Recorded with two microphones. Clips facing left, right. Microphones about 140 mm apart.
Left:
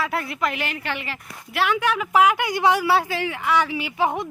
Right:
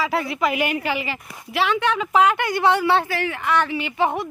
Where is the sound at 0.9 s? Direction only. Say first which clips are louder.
Right 5 dB; centre (ahead or behind).